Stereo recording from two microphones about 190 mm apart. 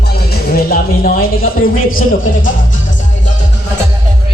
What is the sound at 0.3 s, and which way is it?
Music, 55° left (ahead or behind).